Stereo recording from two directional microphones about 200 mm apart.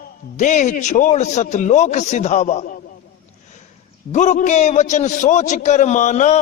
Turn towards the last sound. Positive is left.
turn(degrees=35)  # may be behind; listen again after turning